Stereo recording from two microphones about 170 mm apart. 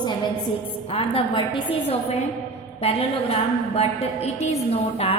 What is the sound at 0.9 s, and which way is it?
A woman's voice, 35° left (ahead or behind).